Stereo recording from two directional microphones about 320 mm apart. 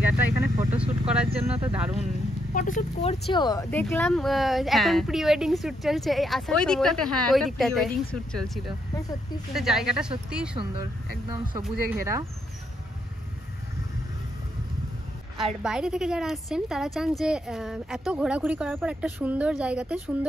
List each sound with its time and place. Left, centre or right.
0.0 s vehicle: centre
1.7 s a woman's voice: centre
2.5 s a woman's voice: left; by 8.5 s centre
9.5 s a woman's voice: centre
10.5 s speech: centre
11.9 s speech: centre
15.3 s a woman's voice: centre